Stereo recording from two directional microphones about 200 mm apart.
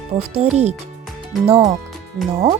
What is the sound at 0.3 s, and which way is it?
Speech, 35° right (ahead or behind).